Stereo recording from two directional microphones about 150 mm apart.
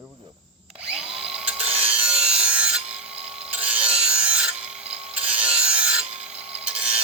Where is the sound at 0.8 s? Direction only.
5° right (ahead or behind).